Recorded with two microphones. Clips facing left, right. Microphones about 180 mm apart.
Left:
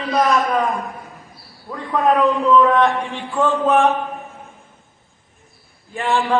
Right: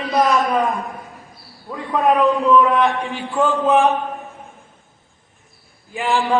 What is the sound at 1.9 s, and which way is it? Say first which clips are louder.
A man's voice: even; 10° right (ahead or behind).